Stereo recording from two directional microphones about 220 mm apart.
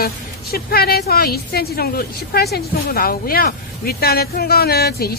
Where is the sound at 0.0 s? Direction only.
45° left (ahead or behind).